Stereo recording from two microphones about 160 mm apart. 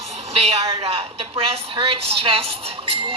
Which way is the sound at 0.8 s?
40° right (ahead or behind).